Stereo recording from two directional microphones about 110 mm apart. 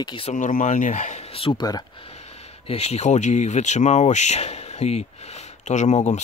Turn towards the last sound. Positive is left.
turn(degrees=90)